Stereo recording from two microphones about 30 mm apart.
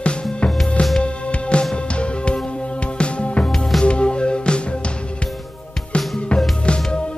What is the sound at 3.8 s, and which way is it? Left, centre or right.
Music, left.